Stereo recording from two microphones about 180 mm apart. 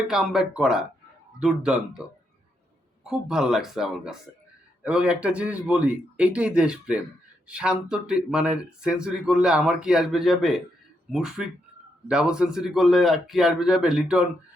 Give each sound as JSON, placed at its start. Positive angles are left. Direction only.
{"t": 0.1, "sound": "speech", "side_deg": -5}